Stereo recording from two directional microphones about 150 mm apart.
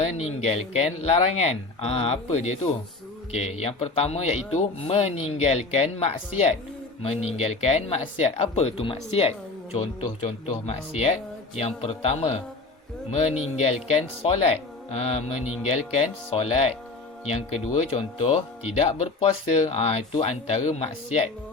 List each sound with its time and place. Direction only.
0.2 s speech: 45° left (ahead or behind)